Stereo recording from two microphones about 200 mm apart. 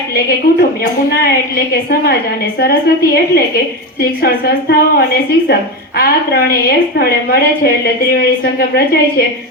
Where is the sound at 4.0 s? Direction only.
50° left (ahead or behind).